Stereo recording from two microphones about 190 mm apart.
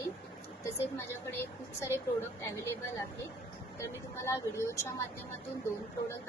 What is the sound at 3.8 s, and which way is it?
Speech, 15° left (ahead or behind).